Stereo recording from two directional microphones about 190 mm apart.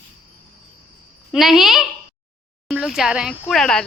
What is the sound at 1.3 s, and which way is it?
Speech, centre (ahead or behind).